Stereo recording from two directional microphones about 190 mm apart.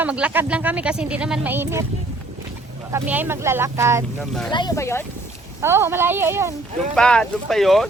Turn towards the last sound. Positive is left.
turn(degrees=0)  # may be behind; listen again after turning